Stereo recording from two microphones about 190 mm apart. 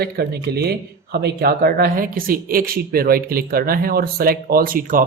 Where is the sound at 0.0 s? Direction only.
55° right (ahead or behind).